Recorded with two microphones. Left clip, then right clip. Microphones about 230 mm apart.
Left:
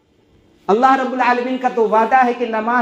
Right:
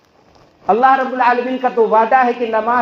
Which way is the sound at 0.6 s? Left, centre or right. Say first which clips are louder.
Right 2 dB; left.